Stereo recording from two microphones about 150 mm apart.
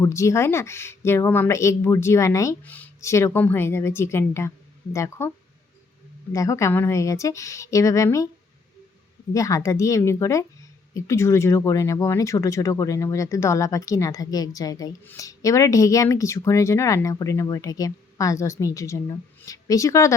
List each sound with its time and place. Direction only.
0.0 s speech: 20° left (ahead or behind)
6.3 s speech: 20° left (ahead or behind)
9.3 s speech: 20° left (ahead or behind)